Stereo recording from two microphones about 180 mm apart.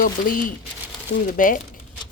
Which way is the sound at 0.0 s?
50° left (ahead or behind).